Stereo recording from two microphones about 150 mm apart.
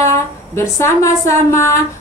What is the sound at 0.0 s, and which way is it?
Speech, 20° left (ahead or behind).